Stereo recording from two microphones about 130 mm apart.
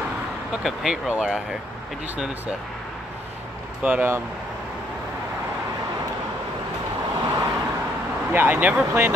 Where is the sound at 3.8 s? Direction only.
15° right (ahead or behind).